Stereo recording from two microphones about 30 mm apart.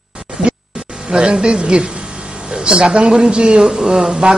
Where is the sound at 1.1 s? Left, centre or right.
Right.